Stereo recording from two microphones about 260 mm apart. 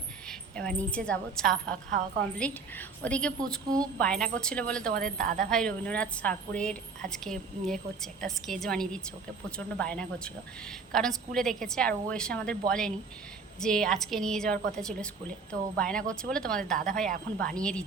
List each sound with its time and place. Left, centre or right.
0.3 s a woman's voice: centre
1.9 s a woman's voice: right
2.4 s a woman's voice: centre
5.1 s a woman's voice: right
5.5 s a woman's voice: centre
16.7 s a woman's voice: right
17.4 s a woman's voice: centre